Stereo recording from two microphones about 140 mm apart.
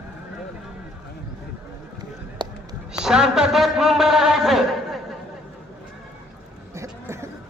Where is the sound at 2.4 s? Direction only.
30° right (ahead or behind).